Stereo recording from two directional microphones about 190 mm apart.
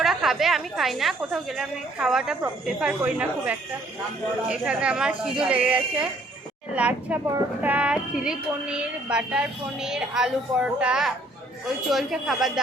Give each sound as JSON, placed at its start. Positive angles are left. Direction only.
{"t": 0.0, "sound": "a woman's voice", "side_deg": 0}